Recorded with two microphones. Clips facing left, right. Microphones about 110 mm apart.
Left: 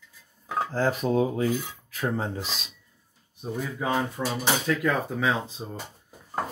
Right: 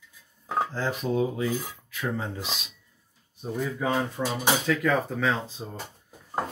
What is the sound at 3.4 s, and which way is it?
Speech, 5° left (ahead or behind).